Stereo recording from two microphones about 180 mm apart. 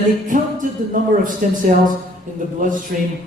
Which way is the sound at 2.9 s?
55° right (ahead or behind).